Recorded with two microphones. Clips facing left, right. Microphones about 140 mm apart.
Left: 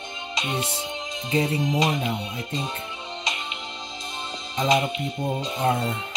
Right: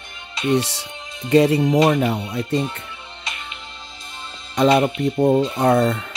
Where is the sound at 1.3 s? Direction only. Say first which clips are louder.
Right 9 dB; 80° right.